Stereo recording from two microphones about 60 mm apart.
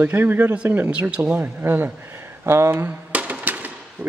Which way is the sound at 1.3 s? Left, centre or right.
Right.